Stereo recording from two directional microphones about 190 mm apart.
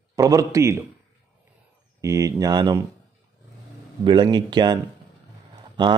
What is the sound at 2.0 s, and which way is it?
Speech, 15° right (ahead or behind).